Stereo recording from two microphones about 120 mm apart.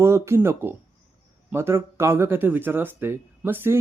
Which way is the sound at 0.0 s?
20° right (ahead or behind).